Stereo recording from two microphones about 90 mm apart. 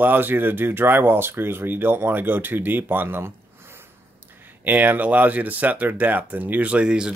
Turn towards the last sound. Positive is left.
turn(degrees=-10)  # may be behind; listen again after turning